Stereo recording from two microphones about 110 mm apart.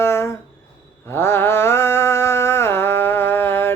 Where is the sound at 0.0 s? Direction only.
20° left (ahead or behind).